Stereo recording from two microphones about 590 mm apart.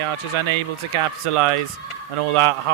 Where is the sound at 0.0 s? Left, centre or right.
Right.